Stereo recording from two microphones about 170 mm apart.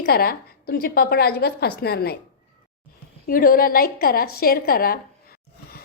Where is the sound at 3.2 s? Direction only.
55° left (ahead or behind).